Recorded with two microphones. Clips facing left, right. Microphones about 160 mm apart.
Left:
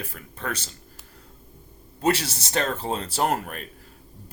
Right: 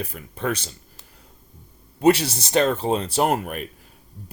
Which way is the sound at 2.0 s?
15° right (ahead or behind).